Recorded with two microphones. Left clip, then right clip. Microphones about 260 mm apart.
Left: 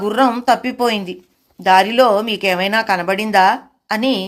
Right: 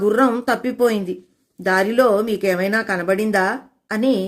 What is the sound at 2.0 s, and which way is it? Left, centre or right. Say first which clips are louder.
Speech: left 3 dB; left.